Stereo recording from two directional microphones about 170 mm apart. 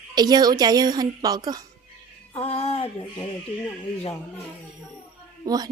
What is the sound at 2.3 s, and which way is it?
Music, 35° left (ahead or behind).